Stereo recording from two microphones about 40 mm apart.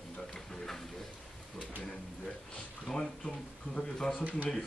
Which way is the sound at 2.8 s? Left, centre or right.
Centre.